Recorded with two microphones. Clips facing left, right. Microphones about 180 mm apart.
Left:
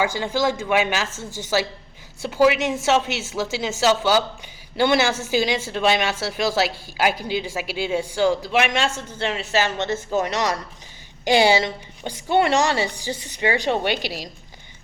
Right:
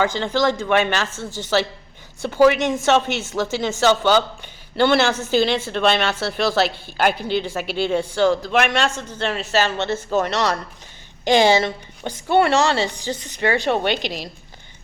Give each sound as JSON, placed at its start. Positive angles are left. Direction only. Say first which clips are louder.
{"t": 0.0, "sound": "a woman's voice", "louder": "right 2 dB", "side_deg": 10}